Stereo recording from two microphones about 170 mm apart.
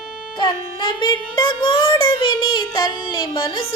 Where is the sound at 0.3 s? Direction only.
25° left (ahead or behind).